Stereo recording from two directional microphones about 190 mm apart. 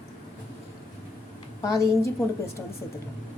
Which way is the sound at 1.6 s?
15° left (ahead or behind).